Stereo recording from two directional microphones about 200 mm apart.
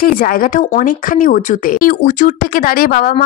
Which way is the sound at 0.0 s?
45° left (ahead or behind).